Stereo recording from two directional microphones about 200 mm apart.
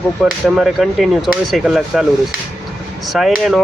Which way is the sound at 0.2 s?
Centre (ahead or behind).